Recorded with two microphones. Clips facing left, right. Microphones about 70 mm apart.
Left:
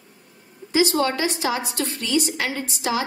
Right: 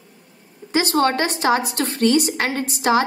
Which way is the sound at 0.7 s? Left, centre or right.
Right.